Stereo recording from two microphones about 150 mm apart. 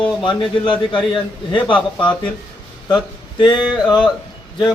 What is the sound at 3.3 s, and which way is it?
Speech, 30° left (ahead or behind).